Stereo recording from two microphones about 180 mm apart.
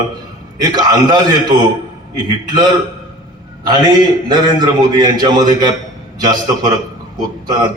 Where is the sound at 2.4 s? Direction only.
20° right (ahead or behind).